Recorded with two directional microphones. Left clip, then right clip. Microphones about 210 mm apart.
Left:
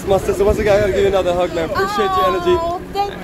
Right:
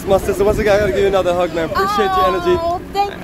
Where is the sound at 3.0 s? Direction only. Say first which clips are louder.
Right 2 dB; 40° right (ahead or behind).